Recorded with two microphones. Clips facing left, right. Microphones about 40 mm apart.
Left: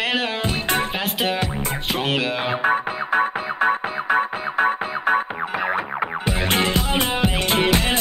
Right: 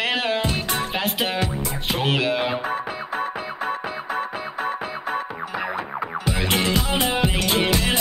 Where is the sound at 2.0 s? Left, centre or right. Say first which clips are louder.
Right 2 dB; centre.